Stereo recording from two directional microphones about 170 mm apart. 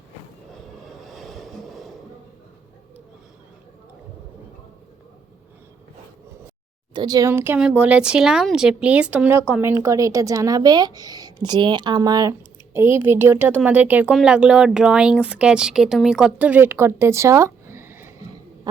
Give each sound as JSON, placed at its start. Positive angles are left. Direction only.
{"t": 0.9, "sound": "vehicle", "side_deg": 0}
{"t": 6.9, "sound": "a woman's voice", "side_deg": -25}